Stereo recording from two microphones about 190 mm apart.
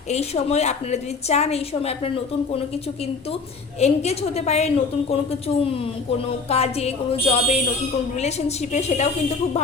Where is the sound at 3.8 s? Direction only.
35° left (ahead or behind).